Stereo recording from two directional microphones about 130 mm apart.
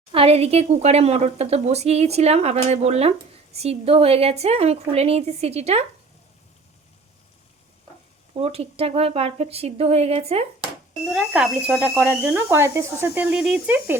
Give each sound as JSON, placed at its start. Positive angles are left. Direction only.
{"t": 0.1, "sound": "a woman's voice", "side_deg": -50}
{"t": 8.3, "sound": "a woman's voice", "side_deg": -50}
{"t": 10.6, "sound": "speech", "side_deg": -5}